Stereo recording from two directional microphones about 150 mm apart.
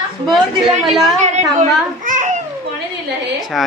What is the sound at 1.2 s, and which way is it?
A child's voice, 55° right (ahead or behind).